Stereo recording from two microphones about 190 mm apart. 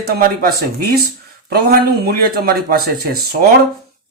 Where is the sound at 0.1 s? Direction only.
50° right (ahead or behind).